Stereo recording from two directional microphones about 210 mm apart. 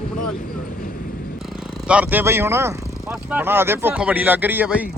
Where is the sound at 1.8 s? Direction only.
5° right (ahead or behind).